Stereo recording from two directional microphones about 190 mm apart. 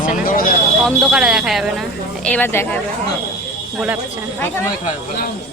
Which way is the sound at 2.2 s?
10° left (ahead or behind).